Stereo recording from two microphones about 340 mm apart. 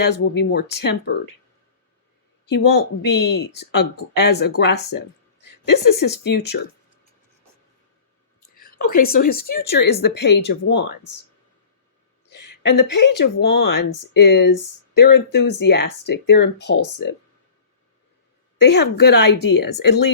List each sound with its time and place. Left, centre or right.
0.0 s a woman's voice: left
2.6 s a woman's voice: left
8.5 s a woman's voice: left
12.3 s a woman's voice: left
18.6 s a woman's voice: left